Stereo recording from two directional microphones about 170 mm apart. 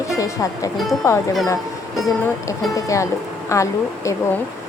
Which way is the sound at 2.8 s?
20° left (ahead or behind).